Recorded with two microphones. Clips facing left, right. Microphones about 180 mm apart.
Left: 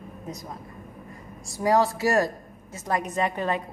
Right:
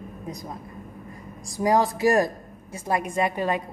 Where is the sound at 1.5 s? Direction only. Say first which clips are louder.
Even; 15° right (ahead or behind).